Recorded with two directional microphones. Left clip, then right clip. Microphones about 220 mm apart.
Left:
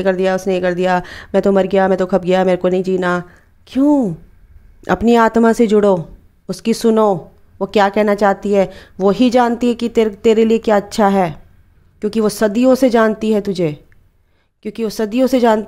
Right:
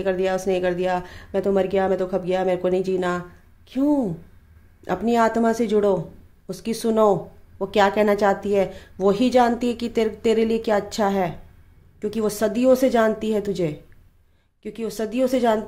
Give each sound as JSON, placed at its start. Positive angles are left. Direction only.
{"t": 0.0, "sound": "speech", "side_deg": 25}